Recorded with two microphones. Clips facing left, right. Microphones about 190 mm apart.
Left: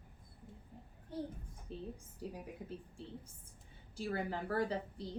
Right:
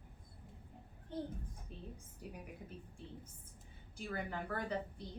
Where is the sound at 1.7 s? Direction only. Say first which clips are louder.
Left 9 dB; 30° left (ahead or behind).